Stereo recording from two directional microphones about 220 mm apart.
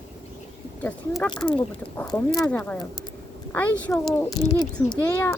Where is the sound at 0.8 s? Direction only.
5° left (ahead or behind).